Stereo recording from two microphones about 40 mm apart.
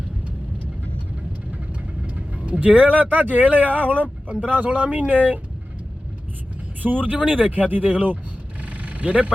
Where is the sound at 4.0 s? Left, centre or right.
Right.